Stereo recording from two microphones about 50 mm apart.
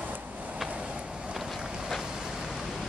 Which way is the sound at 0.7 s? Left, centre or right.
Right.